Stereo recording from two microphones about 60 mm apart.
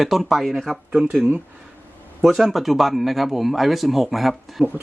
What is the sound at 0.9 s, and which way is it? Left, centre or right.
Speech, centre.